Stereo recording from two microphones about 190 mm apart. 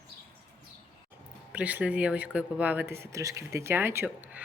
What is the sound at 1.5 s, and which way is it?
Speech, 5° right (ahead or behind).